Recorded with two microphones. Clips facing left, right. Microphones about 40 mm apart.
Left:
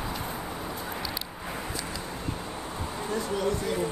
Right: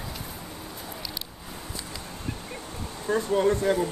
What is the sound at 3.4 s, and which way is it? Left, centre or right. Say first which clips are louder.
Speech: right 7 dB; right.